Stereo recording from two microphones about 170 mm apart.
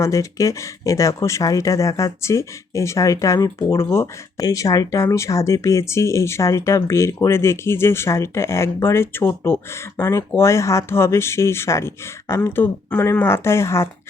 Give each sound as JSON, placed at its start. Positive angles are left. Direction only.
{"t": 0.0, "sound": "speech", "side_deg": 20}